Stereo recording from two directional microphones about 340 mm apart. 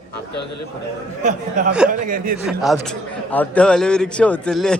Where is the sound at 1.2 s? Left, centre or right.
Right.